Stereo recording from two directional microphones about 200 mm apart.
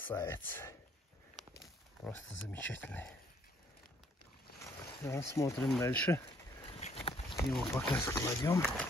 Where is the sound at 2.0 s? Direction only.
10° left (ahead or behind).